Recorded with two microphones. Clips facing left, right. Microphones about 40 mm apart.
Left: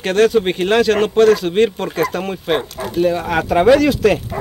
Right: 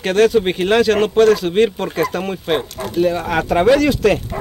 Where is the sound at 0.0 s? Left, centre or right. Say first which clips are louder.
Even; centre.